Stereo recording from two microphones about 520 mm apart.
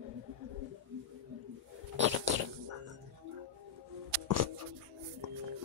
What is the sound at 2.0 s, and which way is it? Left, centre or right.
Bird, right.